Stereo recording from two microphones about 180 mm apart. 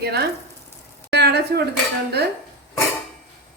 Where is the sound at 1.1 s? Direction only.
65° right (ahead or behind).